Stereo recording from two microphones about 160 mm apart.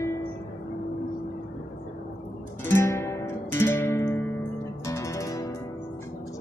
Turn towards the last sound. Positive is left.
turn(degrees=20)  # may be behind; listen again after turning